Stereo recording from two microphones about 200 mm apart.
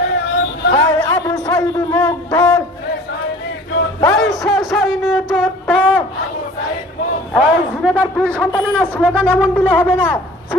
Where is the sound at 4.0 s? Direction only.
Centre (ahead or behind).